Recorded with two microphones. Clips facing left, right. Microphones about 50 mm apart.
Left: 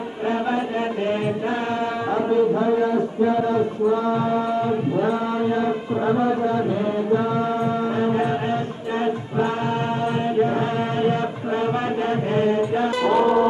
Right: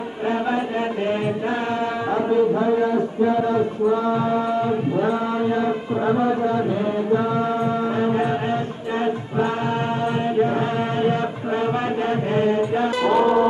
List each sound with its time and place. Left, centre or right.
0.3 s mantra: centre
9.0 s music: centre
10.4 s chant: centre
13.0 s music: right